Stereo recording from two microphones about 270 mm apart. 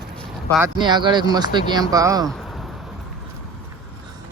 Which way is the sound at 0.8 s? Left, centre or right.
Centre.